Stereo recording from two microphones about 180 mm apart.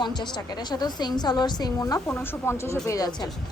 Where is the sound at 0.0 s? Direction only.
25° left (ahead or behind).